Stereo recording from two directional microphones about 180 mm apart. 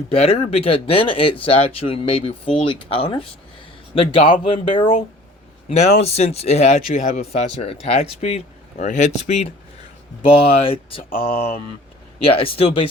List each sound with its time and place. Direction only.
0.1 s speech: 35° left (ahead or behind)
6.1 s speech: 35° left (ahead or behind)
10.4 s speech: 30° left (ahead or behind)